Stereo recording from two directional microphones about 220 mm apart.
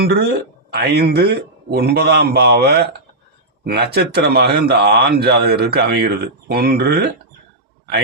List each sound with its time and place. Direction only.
0.0 s a man's voice: 45° right (ahead or behind)